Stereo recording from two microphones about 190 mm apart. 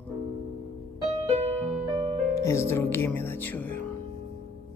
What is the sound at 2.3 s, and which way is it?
Speech, 15° left (ahead or behind).